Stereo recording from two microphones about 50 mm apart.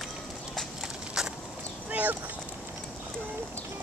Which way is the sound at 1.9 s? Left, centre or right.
Right.